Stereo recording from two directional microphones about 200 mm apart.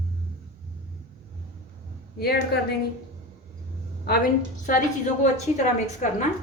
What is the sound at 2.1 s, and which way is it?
Speech, 50° left (ahead or behind).